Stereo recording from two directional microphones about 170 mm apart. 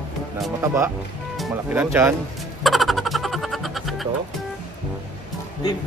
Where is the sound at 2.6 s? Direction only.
Centre (ahead or behind).